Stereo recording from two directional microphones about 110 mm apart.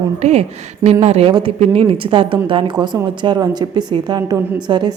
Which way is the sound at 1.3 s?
55° right (ahead or behind).